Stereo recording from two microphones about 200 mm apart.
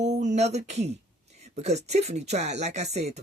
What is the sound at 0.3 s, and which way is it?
Speech, 35° right (ahead or behind).